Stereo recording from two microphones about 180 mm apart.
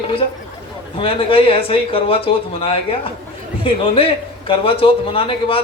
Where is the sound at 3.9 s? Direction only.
30° left (ahead or behind).